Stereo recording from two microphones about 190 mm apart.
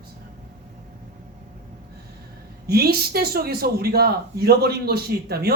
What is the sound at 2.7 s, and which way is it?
A man's voice, 55° right (ahead or behind).